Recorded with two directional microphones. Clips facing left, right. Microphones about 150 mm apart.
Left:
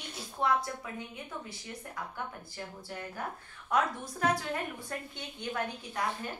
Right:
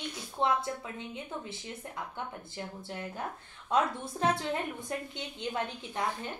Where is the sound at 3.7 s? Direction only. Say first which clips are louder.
Right 1 dB; 25° right (ahead or behind).